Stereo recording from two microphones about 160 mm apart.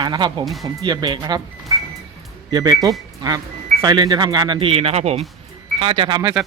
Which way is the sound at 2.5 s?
25° right (ahead or behind).